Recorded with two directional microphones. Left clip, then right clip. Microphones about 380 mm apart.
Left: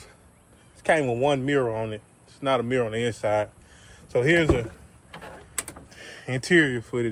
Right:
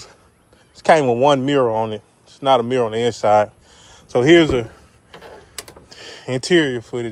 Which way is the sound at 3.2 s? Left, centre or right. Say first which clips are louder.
Right 13 dB; centre.